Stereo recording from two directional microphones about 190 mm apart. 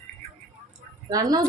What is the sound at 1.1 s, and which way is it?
Speech, 20° right (ahead or behind).